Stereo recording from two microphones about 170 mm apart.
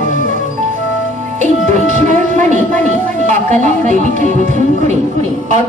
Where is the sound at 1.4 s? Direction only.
45° right (ahead or behind).